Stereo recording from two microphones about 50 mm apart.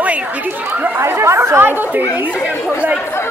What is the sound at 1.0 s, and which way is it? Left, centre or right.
Speech, right.